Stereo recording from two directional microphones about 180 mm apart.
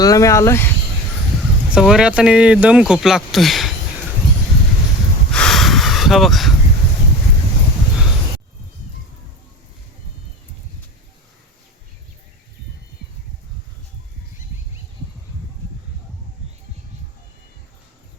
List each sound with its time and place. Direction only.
0.0 s speech: 20° left (ahead or behind)
1.7 s speech: 5° right (ahead or behind)
5.3 s a sound: 5° left (ahead or behind)